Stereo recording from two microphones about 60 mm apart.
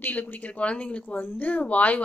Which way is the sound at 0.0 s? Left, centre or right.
Left.